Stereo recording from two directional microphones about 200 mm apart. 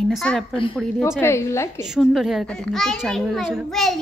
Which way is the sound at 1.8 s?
Centre (ahead or behind).